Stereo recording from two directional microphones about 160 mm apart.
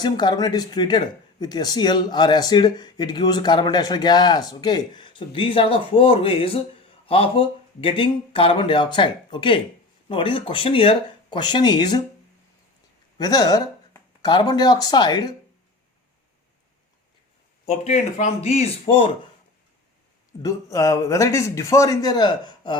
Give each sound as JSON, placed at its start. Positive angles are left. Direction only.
{"t": 0.0, "sound": "speech", "side_deg": 25}
{"t": 13.1, "sound": "speech", "side_deg": 25}
{"t": 17.7, "sound": "speech", "side_deg": 50}
{"t": 20.4, "sound": "speech", "side_deg": 20}